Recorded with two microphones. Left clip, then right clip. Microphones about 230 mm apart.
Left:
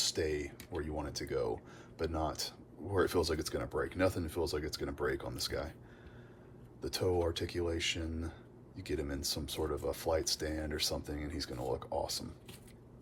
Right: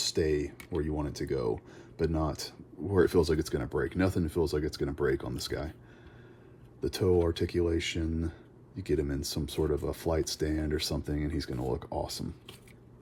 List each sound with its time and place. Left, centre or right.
0.0 s speech: right
6.8 s speech: right